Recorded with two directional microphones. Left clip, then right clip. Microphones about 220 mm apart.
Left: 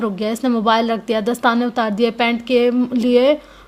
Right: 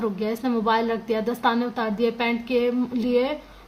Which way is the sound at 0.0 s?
40° left (ahead or behind).